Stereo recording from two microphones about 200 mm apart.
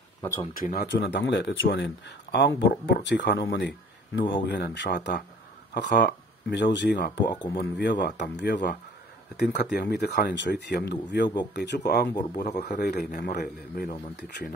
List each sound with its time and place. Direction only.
0.6 s speech: 50° left (ahead or behind)
7.6 s speech: 60° left (ahead or behind)